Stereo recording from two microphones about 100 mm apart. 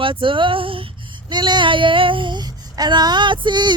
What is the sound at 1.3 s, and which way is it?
Speech, 50° right (ahead or behind).